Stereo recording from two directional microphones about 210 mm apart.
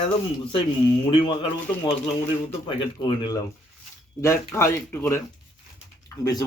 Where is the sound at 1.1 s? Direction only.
25° left (ahead or behind).